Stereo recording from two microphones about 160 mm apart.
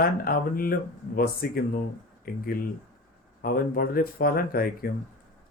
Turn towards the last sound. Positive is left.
turn(degrees=65)  # may be behind; listen again after turning